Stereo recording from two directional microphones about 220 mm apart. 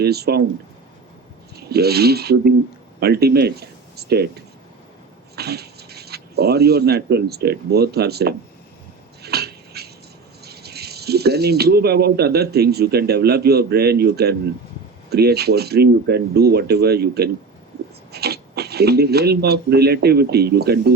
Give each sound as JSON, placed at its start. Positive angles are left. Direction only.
{"t": 0.0, "sound": "speech", "side_deg": -45}
{"t": 1.5, "sound": "speech", "side_deg": -45}
{"t": 5.4, "sound": "speech", "side_deg": -45}
{"t": 9.2, "sound": "a sound", "side_deg": -45}
{"t": 10.4, "sound": "speech", "side_deg": -45}